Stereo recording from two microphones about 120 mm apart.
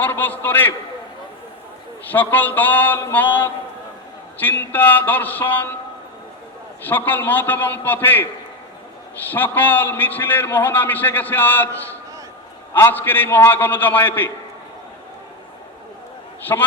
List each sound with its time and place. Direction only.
0.0 s a man's voice: 15° left (ahead or behind)
2.0 s a man's voice: 15° left (ahead or behind)
6.8 s a man's voice: 15° left (ahead or behind)
9.3 s a man's voice: 15° left (ahead or behind)
16.5 s a man's voice: 15° left (ahead or behind)